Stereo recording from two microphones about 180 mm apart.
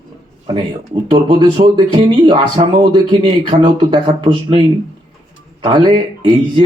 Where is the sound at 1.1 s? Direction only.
25° right (ahead or behind).